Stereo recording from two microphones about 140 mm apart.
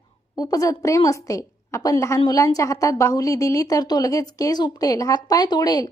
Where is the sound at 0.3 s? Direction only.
25° left (ahead or behind).